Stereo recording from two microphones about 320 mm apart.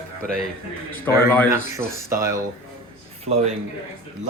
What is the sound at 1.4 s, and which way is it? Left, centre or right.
A man's voice, centre.